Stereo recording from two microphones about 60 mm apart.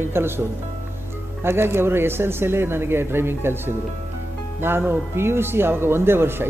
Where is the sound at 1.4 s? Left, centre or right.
Right.